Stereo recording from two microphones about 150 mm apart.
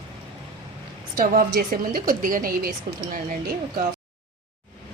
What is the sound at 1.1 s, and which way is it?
A woman's voice, 75° right (ahead or behind).